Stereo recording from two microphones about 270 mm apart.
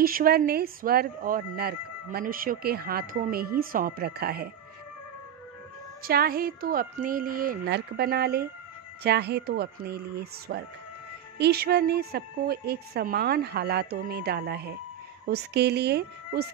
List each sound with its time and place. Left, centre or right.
0.0 s speech: right
6.0 s speech: right